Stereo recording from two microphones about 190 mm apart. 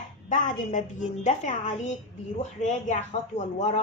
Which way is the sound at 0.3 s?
40° left (ahead or behind).